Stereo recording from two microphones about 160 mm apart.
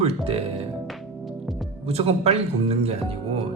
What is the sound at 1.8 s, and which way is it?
Speech, 40° right (ahead or behind).